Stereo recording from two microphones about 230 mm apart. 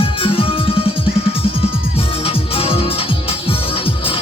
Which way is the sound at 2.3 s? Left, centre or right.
Left.